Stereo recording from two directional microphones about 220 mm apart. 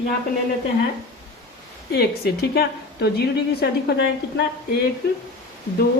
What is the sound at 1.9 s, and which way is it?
A woman's voice, 45° left (ahead or behind).